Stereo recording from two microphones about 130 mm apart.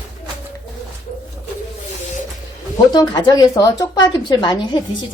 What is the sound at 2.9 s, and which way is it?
A woman's voice, 30° left (ahead or behind).